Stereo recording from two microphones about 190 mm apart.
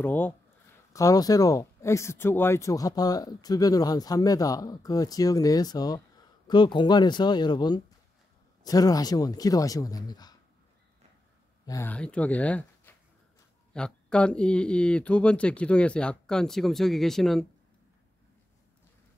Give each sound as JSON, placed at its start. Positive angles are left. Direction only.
{"t": 0.0, "sound": "speech", "side_deg": 10}
{"t": 11.6, "sound": "speech", "side_deg": 15}